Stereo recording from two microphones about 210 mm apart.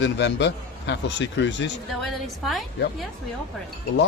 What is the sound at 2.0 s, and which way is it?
Speech, centre (ahead or behind).